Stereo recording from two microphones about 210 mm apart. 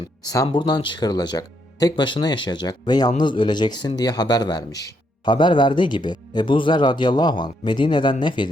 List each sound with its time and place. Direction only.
0.3 s a man's voice: 20° left (ahead or behind)